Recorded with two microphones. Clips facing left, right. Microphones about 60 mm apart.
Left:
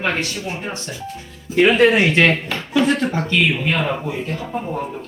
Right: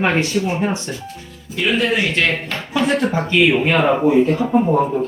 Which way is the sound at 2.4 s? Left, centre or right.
Centre.